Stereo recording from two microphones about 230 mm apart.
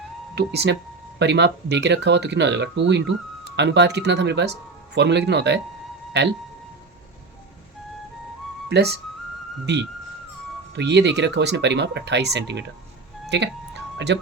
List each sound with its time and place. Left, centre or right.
0.3 s speech: right
8.7 s speech: right